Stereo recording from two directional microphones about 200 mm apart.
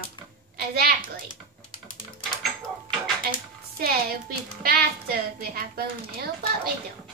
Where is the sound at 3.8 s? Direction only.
50° right (ahead or behind).